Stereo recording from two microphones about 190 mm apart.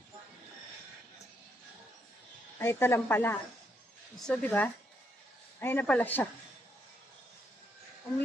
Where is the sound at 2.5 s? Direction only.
15° left (ahead or behind).